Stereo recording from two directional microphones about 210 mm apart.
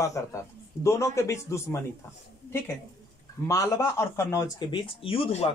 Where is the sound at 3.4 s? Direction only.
15° left (ahead or behind).